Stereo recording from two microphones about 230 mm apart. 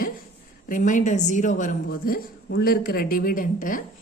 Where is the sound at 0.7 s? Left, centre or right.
Left.